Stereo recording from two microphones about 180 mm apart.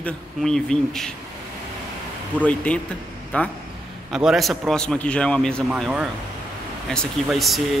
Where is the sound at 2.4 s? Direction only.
5° left (ahead or behind).